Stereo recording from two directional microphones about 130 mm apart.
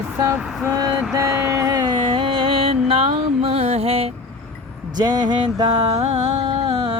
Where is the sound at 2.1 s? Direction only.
45° right (ahead or behind).